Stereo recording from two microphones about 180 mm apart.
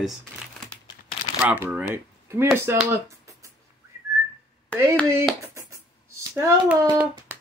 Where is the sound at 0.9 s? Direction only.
25° left (ahead or behind).